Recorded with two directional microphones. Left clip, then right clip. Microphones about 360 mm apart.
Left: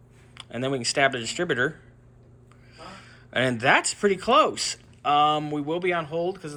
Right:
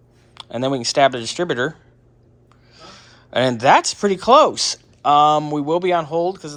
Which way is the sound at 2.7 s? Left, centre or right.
Right.